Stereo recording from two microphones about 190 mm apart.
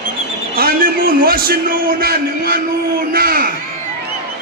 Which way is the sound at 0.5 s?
50° right (ahead or behind).